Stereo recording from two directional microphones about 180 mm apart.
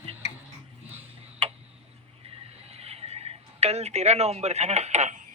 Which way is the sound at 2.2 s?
35° right (ahead or behind).